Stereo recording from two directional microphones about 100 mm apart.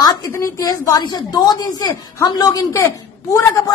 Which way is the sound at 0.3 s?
30° left (ahead or behind).